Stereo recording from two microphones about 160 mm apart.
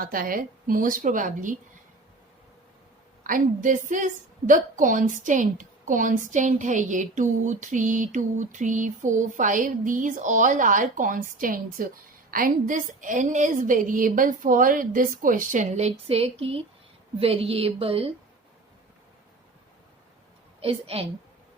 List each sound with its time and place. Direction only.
0.0 s a woman's voice: 65° right (ahead or behind)
3.2 s a woman's voice: 60° right (ahead or behind); by 18.1 s 35° right (ahead or behind)
20.6 s a woman's voice: 35° right (ahead or behind)